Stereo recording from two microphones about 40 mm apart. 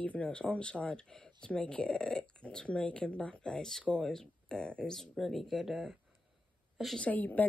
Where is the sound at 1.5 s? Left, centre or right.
Left.